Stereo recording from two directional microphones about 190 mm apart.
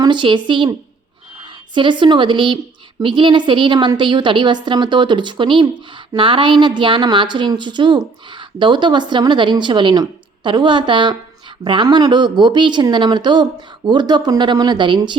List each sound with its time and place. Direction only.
0.0 s a woman's voice: 25° right (ahead or behind)